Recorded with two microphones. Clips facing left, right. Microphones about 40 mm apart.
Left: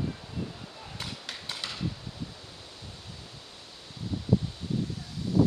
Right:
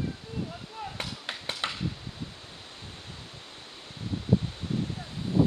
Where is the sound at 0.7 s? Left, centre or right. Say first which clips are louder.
Right 6 dB; right.